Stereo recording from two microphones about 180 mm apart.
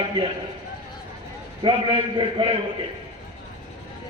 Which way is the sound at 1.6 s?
30° right (ahead or behind).